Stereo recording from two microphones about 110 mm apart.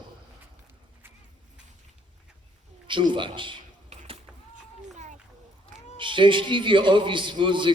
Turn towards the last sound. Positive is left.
turn(degrees=-45)  # may be behind; listen again after turning